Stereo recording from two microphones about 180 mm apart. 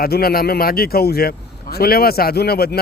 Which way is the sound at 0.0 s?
55° left (ahead or behind).